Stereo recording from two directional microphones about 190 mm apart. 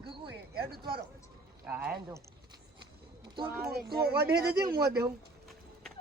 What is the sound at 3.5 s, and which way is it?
Speech, 55° right (ahead or behind).